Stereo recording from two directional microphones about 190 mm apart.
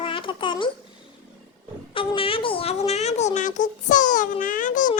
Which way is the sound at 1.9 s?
25° left (ahead or behind).